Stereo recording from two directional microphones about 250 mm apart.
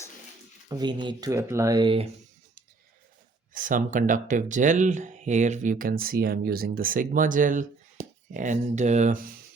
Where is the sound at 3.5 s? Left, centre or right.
Right.